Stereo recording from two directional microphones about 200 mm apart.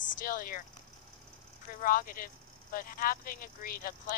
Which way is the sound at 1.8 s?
45° left (ahead or behind).